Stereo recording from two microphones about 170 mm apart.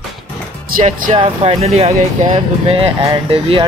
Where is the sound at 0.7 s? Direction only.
50° right (ahead or behind).